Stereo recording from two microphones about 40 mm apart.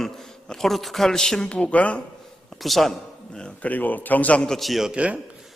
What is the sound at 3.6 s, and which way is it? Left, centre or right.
Speech, left.